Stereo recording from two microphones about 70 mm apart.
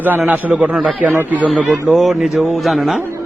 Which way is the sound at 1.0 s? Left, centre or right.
Right.